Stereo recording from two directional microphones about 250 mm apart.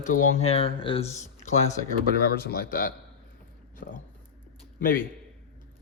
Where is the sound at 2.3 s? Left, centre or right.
Left.